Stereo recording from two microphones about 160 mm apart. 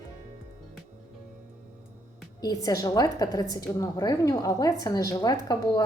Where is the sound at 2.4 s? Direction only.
25° left (ahead or behind).